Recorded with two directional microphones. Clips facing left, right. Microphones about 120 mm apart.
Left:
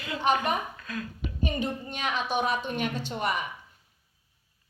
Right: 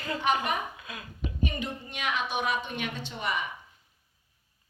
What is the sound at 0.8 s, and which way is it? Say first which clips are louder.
Speech: left 7 dB; 15° right (ahead or behind).